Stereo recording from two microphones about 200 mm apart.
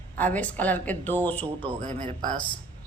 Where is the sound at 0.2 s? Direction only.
10° left (ahead or behind).